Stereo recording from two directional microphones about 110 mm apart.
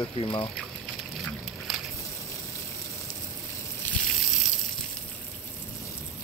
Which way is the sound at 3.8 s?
20° left (ahead or behind).